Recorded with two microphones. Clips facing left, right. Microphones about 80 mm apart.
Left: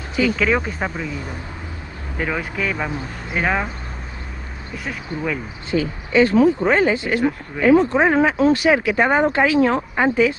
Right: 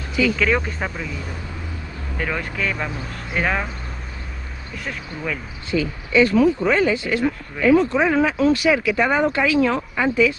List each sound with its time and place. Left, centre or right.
0.4 s speech: centre
2.1 s speech: centre
4.7 s speech: centre
5.7 s speech: left